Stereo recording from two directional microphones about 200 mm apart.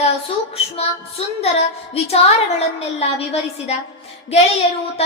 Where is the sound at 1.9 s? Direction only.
30° left (ahead or behind).